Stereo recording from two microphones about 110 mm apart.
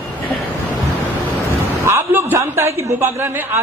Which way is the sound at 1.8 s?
25° right (ahead or behind).